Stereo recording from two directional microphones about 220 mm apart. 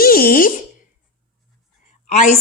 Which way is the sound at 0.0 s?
40° left (ahead or behind).